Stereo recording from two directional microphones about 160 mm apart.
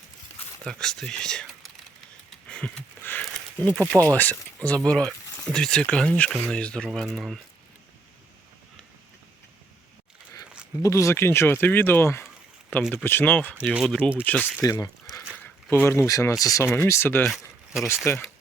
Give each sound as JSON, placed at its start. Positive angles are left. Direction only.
{"t": 0.6, "sound": "speech", "side_deg": 5}
{"t": 2.5, "sound": "a sound", "side_deg": 5}
{"t": 4.0, "sound": "speech", "side_deg": 10}
{"t": 10.8, "sound": "speech", "side_deg": 20}
{"t": 13.7, "sound": "speech", "side_deg": -5}
{"t": 14.3, "sound": "speech", "side_deg": 10}
{"t": 14.6, "sound": "speech", "side_deg": 20}
{"t": 15.4, "sound": "speech", "side_deg": 10}